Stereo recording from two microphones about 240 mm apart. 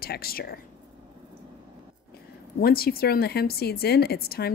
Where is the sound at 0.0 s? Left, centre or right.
Left.